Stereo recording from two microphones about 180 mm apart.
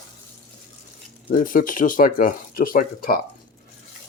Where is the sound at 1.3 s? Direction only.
50° left (ahead or behind).